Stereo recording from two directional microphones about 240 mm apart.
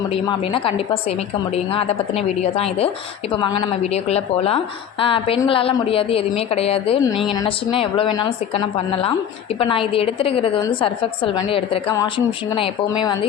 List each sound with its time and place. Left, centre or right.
0.1 s a woman's voice: left
3.9 s a woman's voice: left
7.1 s speech: centre
7.4 s a woman's voice: left